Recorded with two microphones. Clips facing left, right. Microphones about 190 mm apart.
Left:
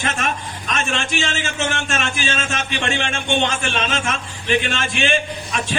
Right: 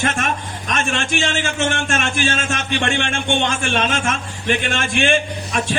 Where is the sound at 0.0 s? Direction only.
55° right (ahead or behind).